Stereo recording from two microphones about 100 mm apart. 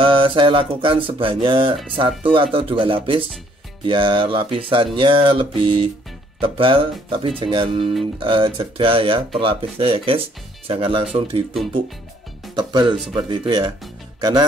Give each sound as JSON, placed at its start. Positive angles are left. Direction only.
{"t": 0.0, "sound": "speech", "side_deg": -55}
{"t": 12.5, "sound": "speech", "side_deg": -50}